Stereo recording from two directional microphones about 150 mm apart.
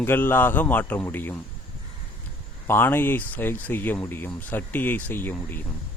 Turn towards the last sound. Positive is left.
turn(degrees=15)  # may be behind; listen again after turning